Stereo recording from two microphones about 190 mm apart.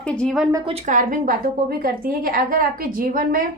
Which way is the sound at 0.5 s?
30° right (ahead or behind).